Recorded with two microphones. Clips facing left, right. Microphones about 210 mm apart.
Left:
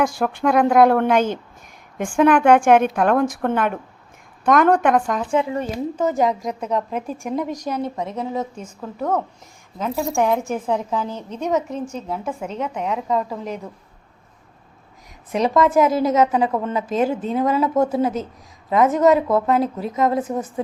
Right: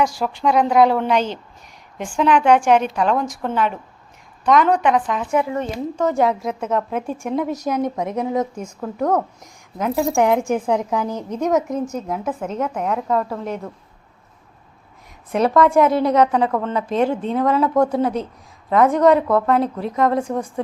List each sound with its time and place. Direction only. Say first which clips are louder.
0.0 s a woman's voice: even; 55° left (ahead or behind)
5.3 s speech: right 1 dB; 25° left (ahead or behind)
5.5 s a woman's voice: even; 5° left (ahead or behind)
13.1 s a woman's voice: right 1 dB; 15° left (ahead or behind)
15.3 s a woman's voice: right 2 dB; centre (ahead or behind)